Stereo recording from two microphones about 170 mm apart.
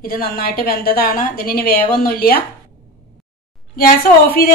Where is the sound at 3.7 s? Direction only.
60° left (ahead or behind).